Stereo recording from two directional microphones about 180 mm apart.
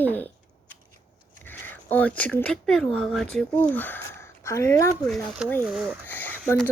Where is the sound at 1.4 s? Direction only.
10° left (ahead or behind).